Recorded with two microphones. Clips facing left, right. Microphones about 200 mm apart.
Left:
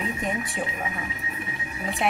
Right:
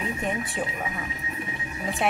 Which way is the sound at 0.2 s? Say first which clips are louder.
Even; centre (ahead or behind).